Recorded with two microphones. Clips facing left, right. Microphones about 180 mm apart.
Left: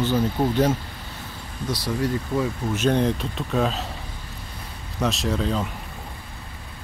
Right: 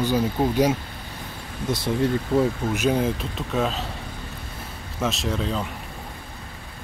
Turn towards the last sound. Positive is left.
turn(degrees=0)  # may be behind; listen again after turning